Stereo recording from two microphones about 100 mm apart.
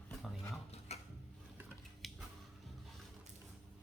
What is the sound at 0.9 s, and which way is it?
Mechanisms, 90° left.